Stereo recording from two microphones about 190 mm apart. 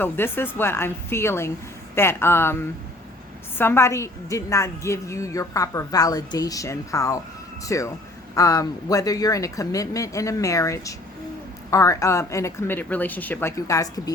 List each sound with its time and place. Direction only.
0.0 s a woman's voice: 10° left (ahead or behind)